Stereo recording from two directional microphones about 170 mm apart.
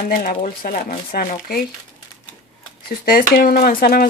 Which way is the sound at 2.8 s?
60° left (ahead or behind).